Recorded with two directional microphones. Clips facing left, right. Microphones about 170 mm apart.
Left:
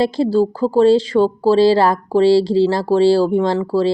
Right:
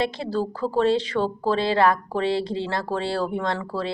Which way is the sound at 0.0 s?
35° left (ahead or behind).